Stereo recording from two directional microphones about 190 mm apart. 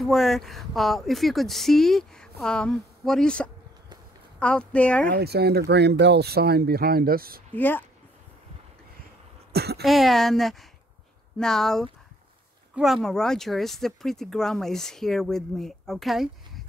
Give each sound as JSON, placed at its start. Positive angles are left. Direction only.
{"t": 0.0, "sound": "speech", "side_deg": 0}
{"t": 5.0, "sound": "speech", "side_deg": -55}
{"t": 7.5, "sound": "speech", "side_deg": 10}
{"t": 9.5, "sound": "speech", "side_deg": -55}
{"t": 9.8, "sound": "speech", "side_deg": 0}